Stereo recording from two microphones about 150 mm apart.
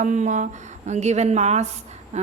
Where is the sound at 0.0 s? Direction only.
55° right (ahead or behind).